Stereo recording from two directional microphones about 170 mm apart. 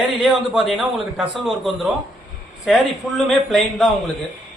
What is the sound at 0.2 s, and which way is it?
A man's voice, centre (ahead or behind).